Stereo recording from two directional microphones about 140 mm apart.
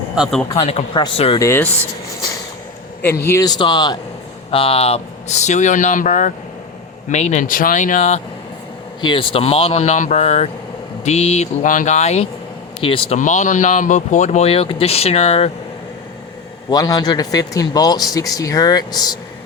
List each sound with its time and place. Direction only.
0.2 s speech: 5° left (ahead or behind)
0.6 s speech: 45° left (ahead or behind)
1.4 s speech: 15° left (ahead or behind)
3.0 s speech: 15° left (ahead or behind)
3.4 s speech: 30° left (ahead or behind); by 8.2 s 60° left (ahead or behind)
9.0 s speech: 35° left (ahead or behind)
11.6 s speech: 65° left (ahead or behind); by 12.3 s 50° left (ahead or behind)
12.8 s speech: 40° left (ahead or behind)
13.1 s speech: 60° left (ahead or behind)
16.6 s a man's voice: 25° left (ahead or behind)